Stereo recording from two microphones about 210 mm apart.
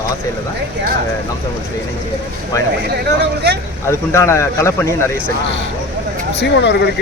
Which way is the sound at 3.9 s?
15° left (ahead or behind).